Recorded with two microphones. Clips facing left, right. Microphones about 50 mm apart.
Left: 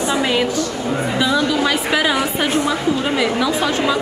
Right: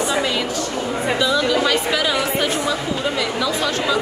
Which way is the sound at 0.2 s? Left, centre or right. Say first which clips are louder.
Left 4 dB; left.